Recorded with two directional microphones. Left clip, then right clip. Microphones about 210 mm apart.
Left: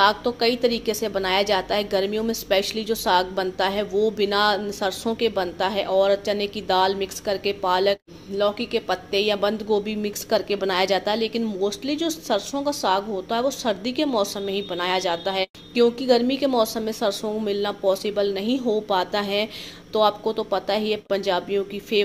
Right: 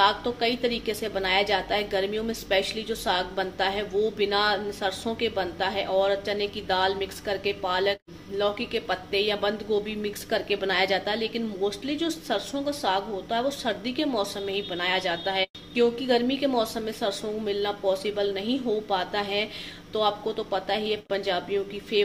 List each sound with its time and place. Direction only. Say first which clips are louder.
0.0 s a woman's voice: left 4 dB; 30° left (ahead or behind)